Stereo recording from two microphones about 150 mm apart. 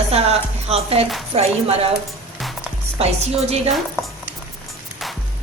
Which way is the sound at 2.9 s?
45° right (ahead or behind).